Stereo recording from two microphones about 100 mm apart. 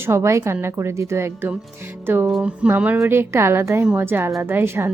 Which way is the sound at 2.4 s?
15° right (ahead or behind).